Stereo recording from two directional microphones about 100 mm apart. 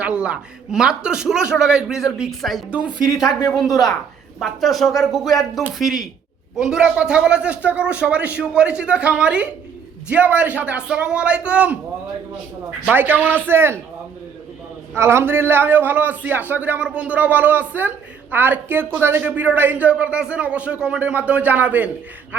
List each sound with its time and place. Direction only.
0.0 s a man's voice: 10° right (ahead or behind)
2.6 s a man's voice: 15° right (ahead or behind)
3.5 s a man's voice: centre (ahead or behind)
12.8 s a man's voice: 20° right (ahead or behind)
14.9 s a man's voice: 25° right (ahead or behind)